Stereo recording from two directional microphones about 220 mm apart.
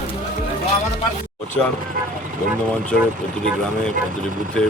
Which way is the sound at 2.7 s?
5° left (ahead or behind).